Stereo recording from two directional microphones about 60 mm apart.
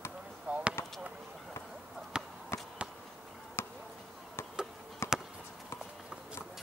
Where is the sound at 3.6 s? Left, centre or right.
Left.